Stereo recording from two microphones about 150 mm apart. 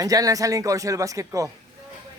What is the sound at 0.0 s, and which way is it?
Speech, 25° right (ahead or behind).